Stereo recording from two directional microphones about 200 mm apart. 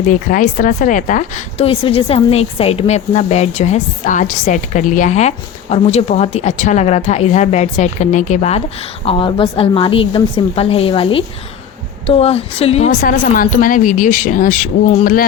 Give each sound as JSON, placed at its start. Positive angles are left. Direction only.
{"t": 0.1, "sound": "a woman's voice", "side_deg": 40}